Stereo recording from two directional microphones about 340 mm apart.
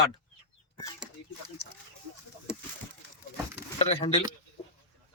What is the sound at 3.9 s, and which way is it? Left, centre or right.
Speech, centre.